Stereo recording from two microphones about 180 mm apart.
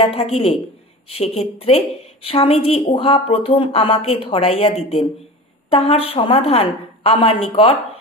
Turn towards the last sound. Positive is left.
turn(degrees=30)  # may be behind; listen again after turning